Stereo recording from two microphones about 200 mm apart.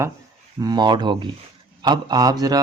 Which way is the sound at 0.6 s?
20° right (ahead or behind).